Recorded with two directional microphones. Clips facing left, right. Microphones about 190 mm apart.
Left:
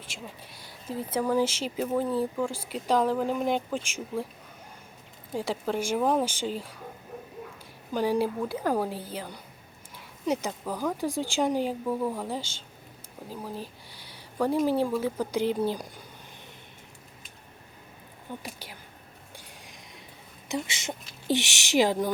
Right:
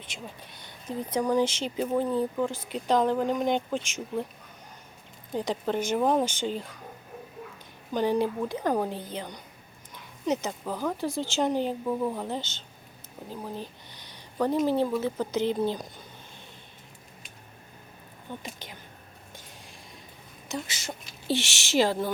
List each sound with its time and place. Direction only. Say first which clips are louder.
0.5 s speech: even; 5° left (ahead or behind)
5.3 s speech: right 1 dB; 5° left (ahead or behind)
7.9 s speech: even; 5° left (ahead or behind)
18.4 s speech: even; 5° left (ahead or behind)
20.5 s speech: left 3 dB; 20° left (ahead or behind)